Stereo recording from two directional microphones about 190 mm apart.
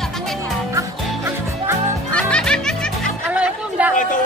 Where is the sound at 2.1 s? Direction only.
5° left (ahead or behind).